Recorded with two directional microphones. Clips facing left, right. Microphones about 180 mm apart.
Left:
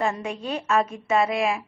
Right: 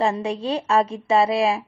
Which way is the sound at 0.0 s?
30° right (ahead or behind).